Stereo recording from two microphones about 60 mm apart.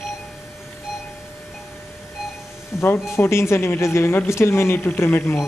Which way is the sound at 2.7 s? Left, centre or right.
Left.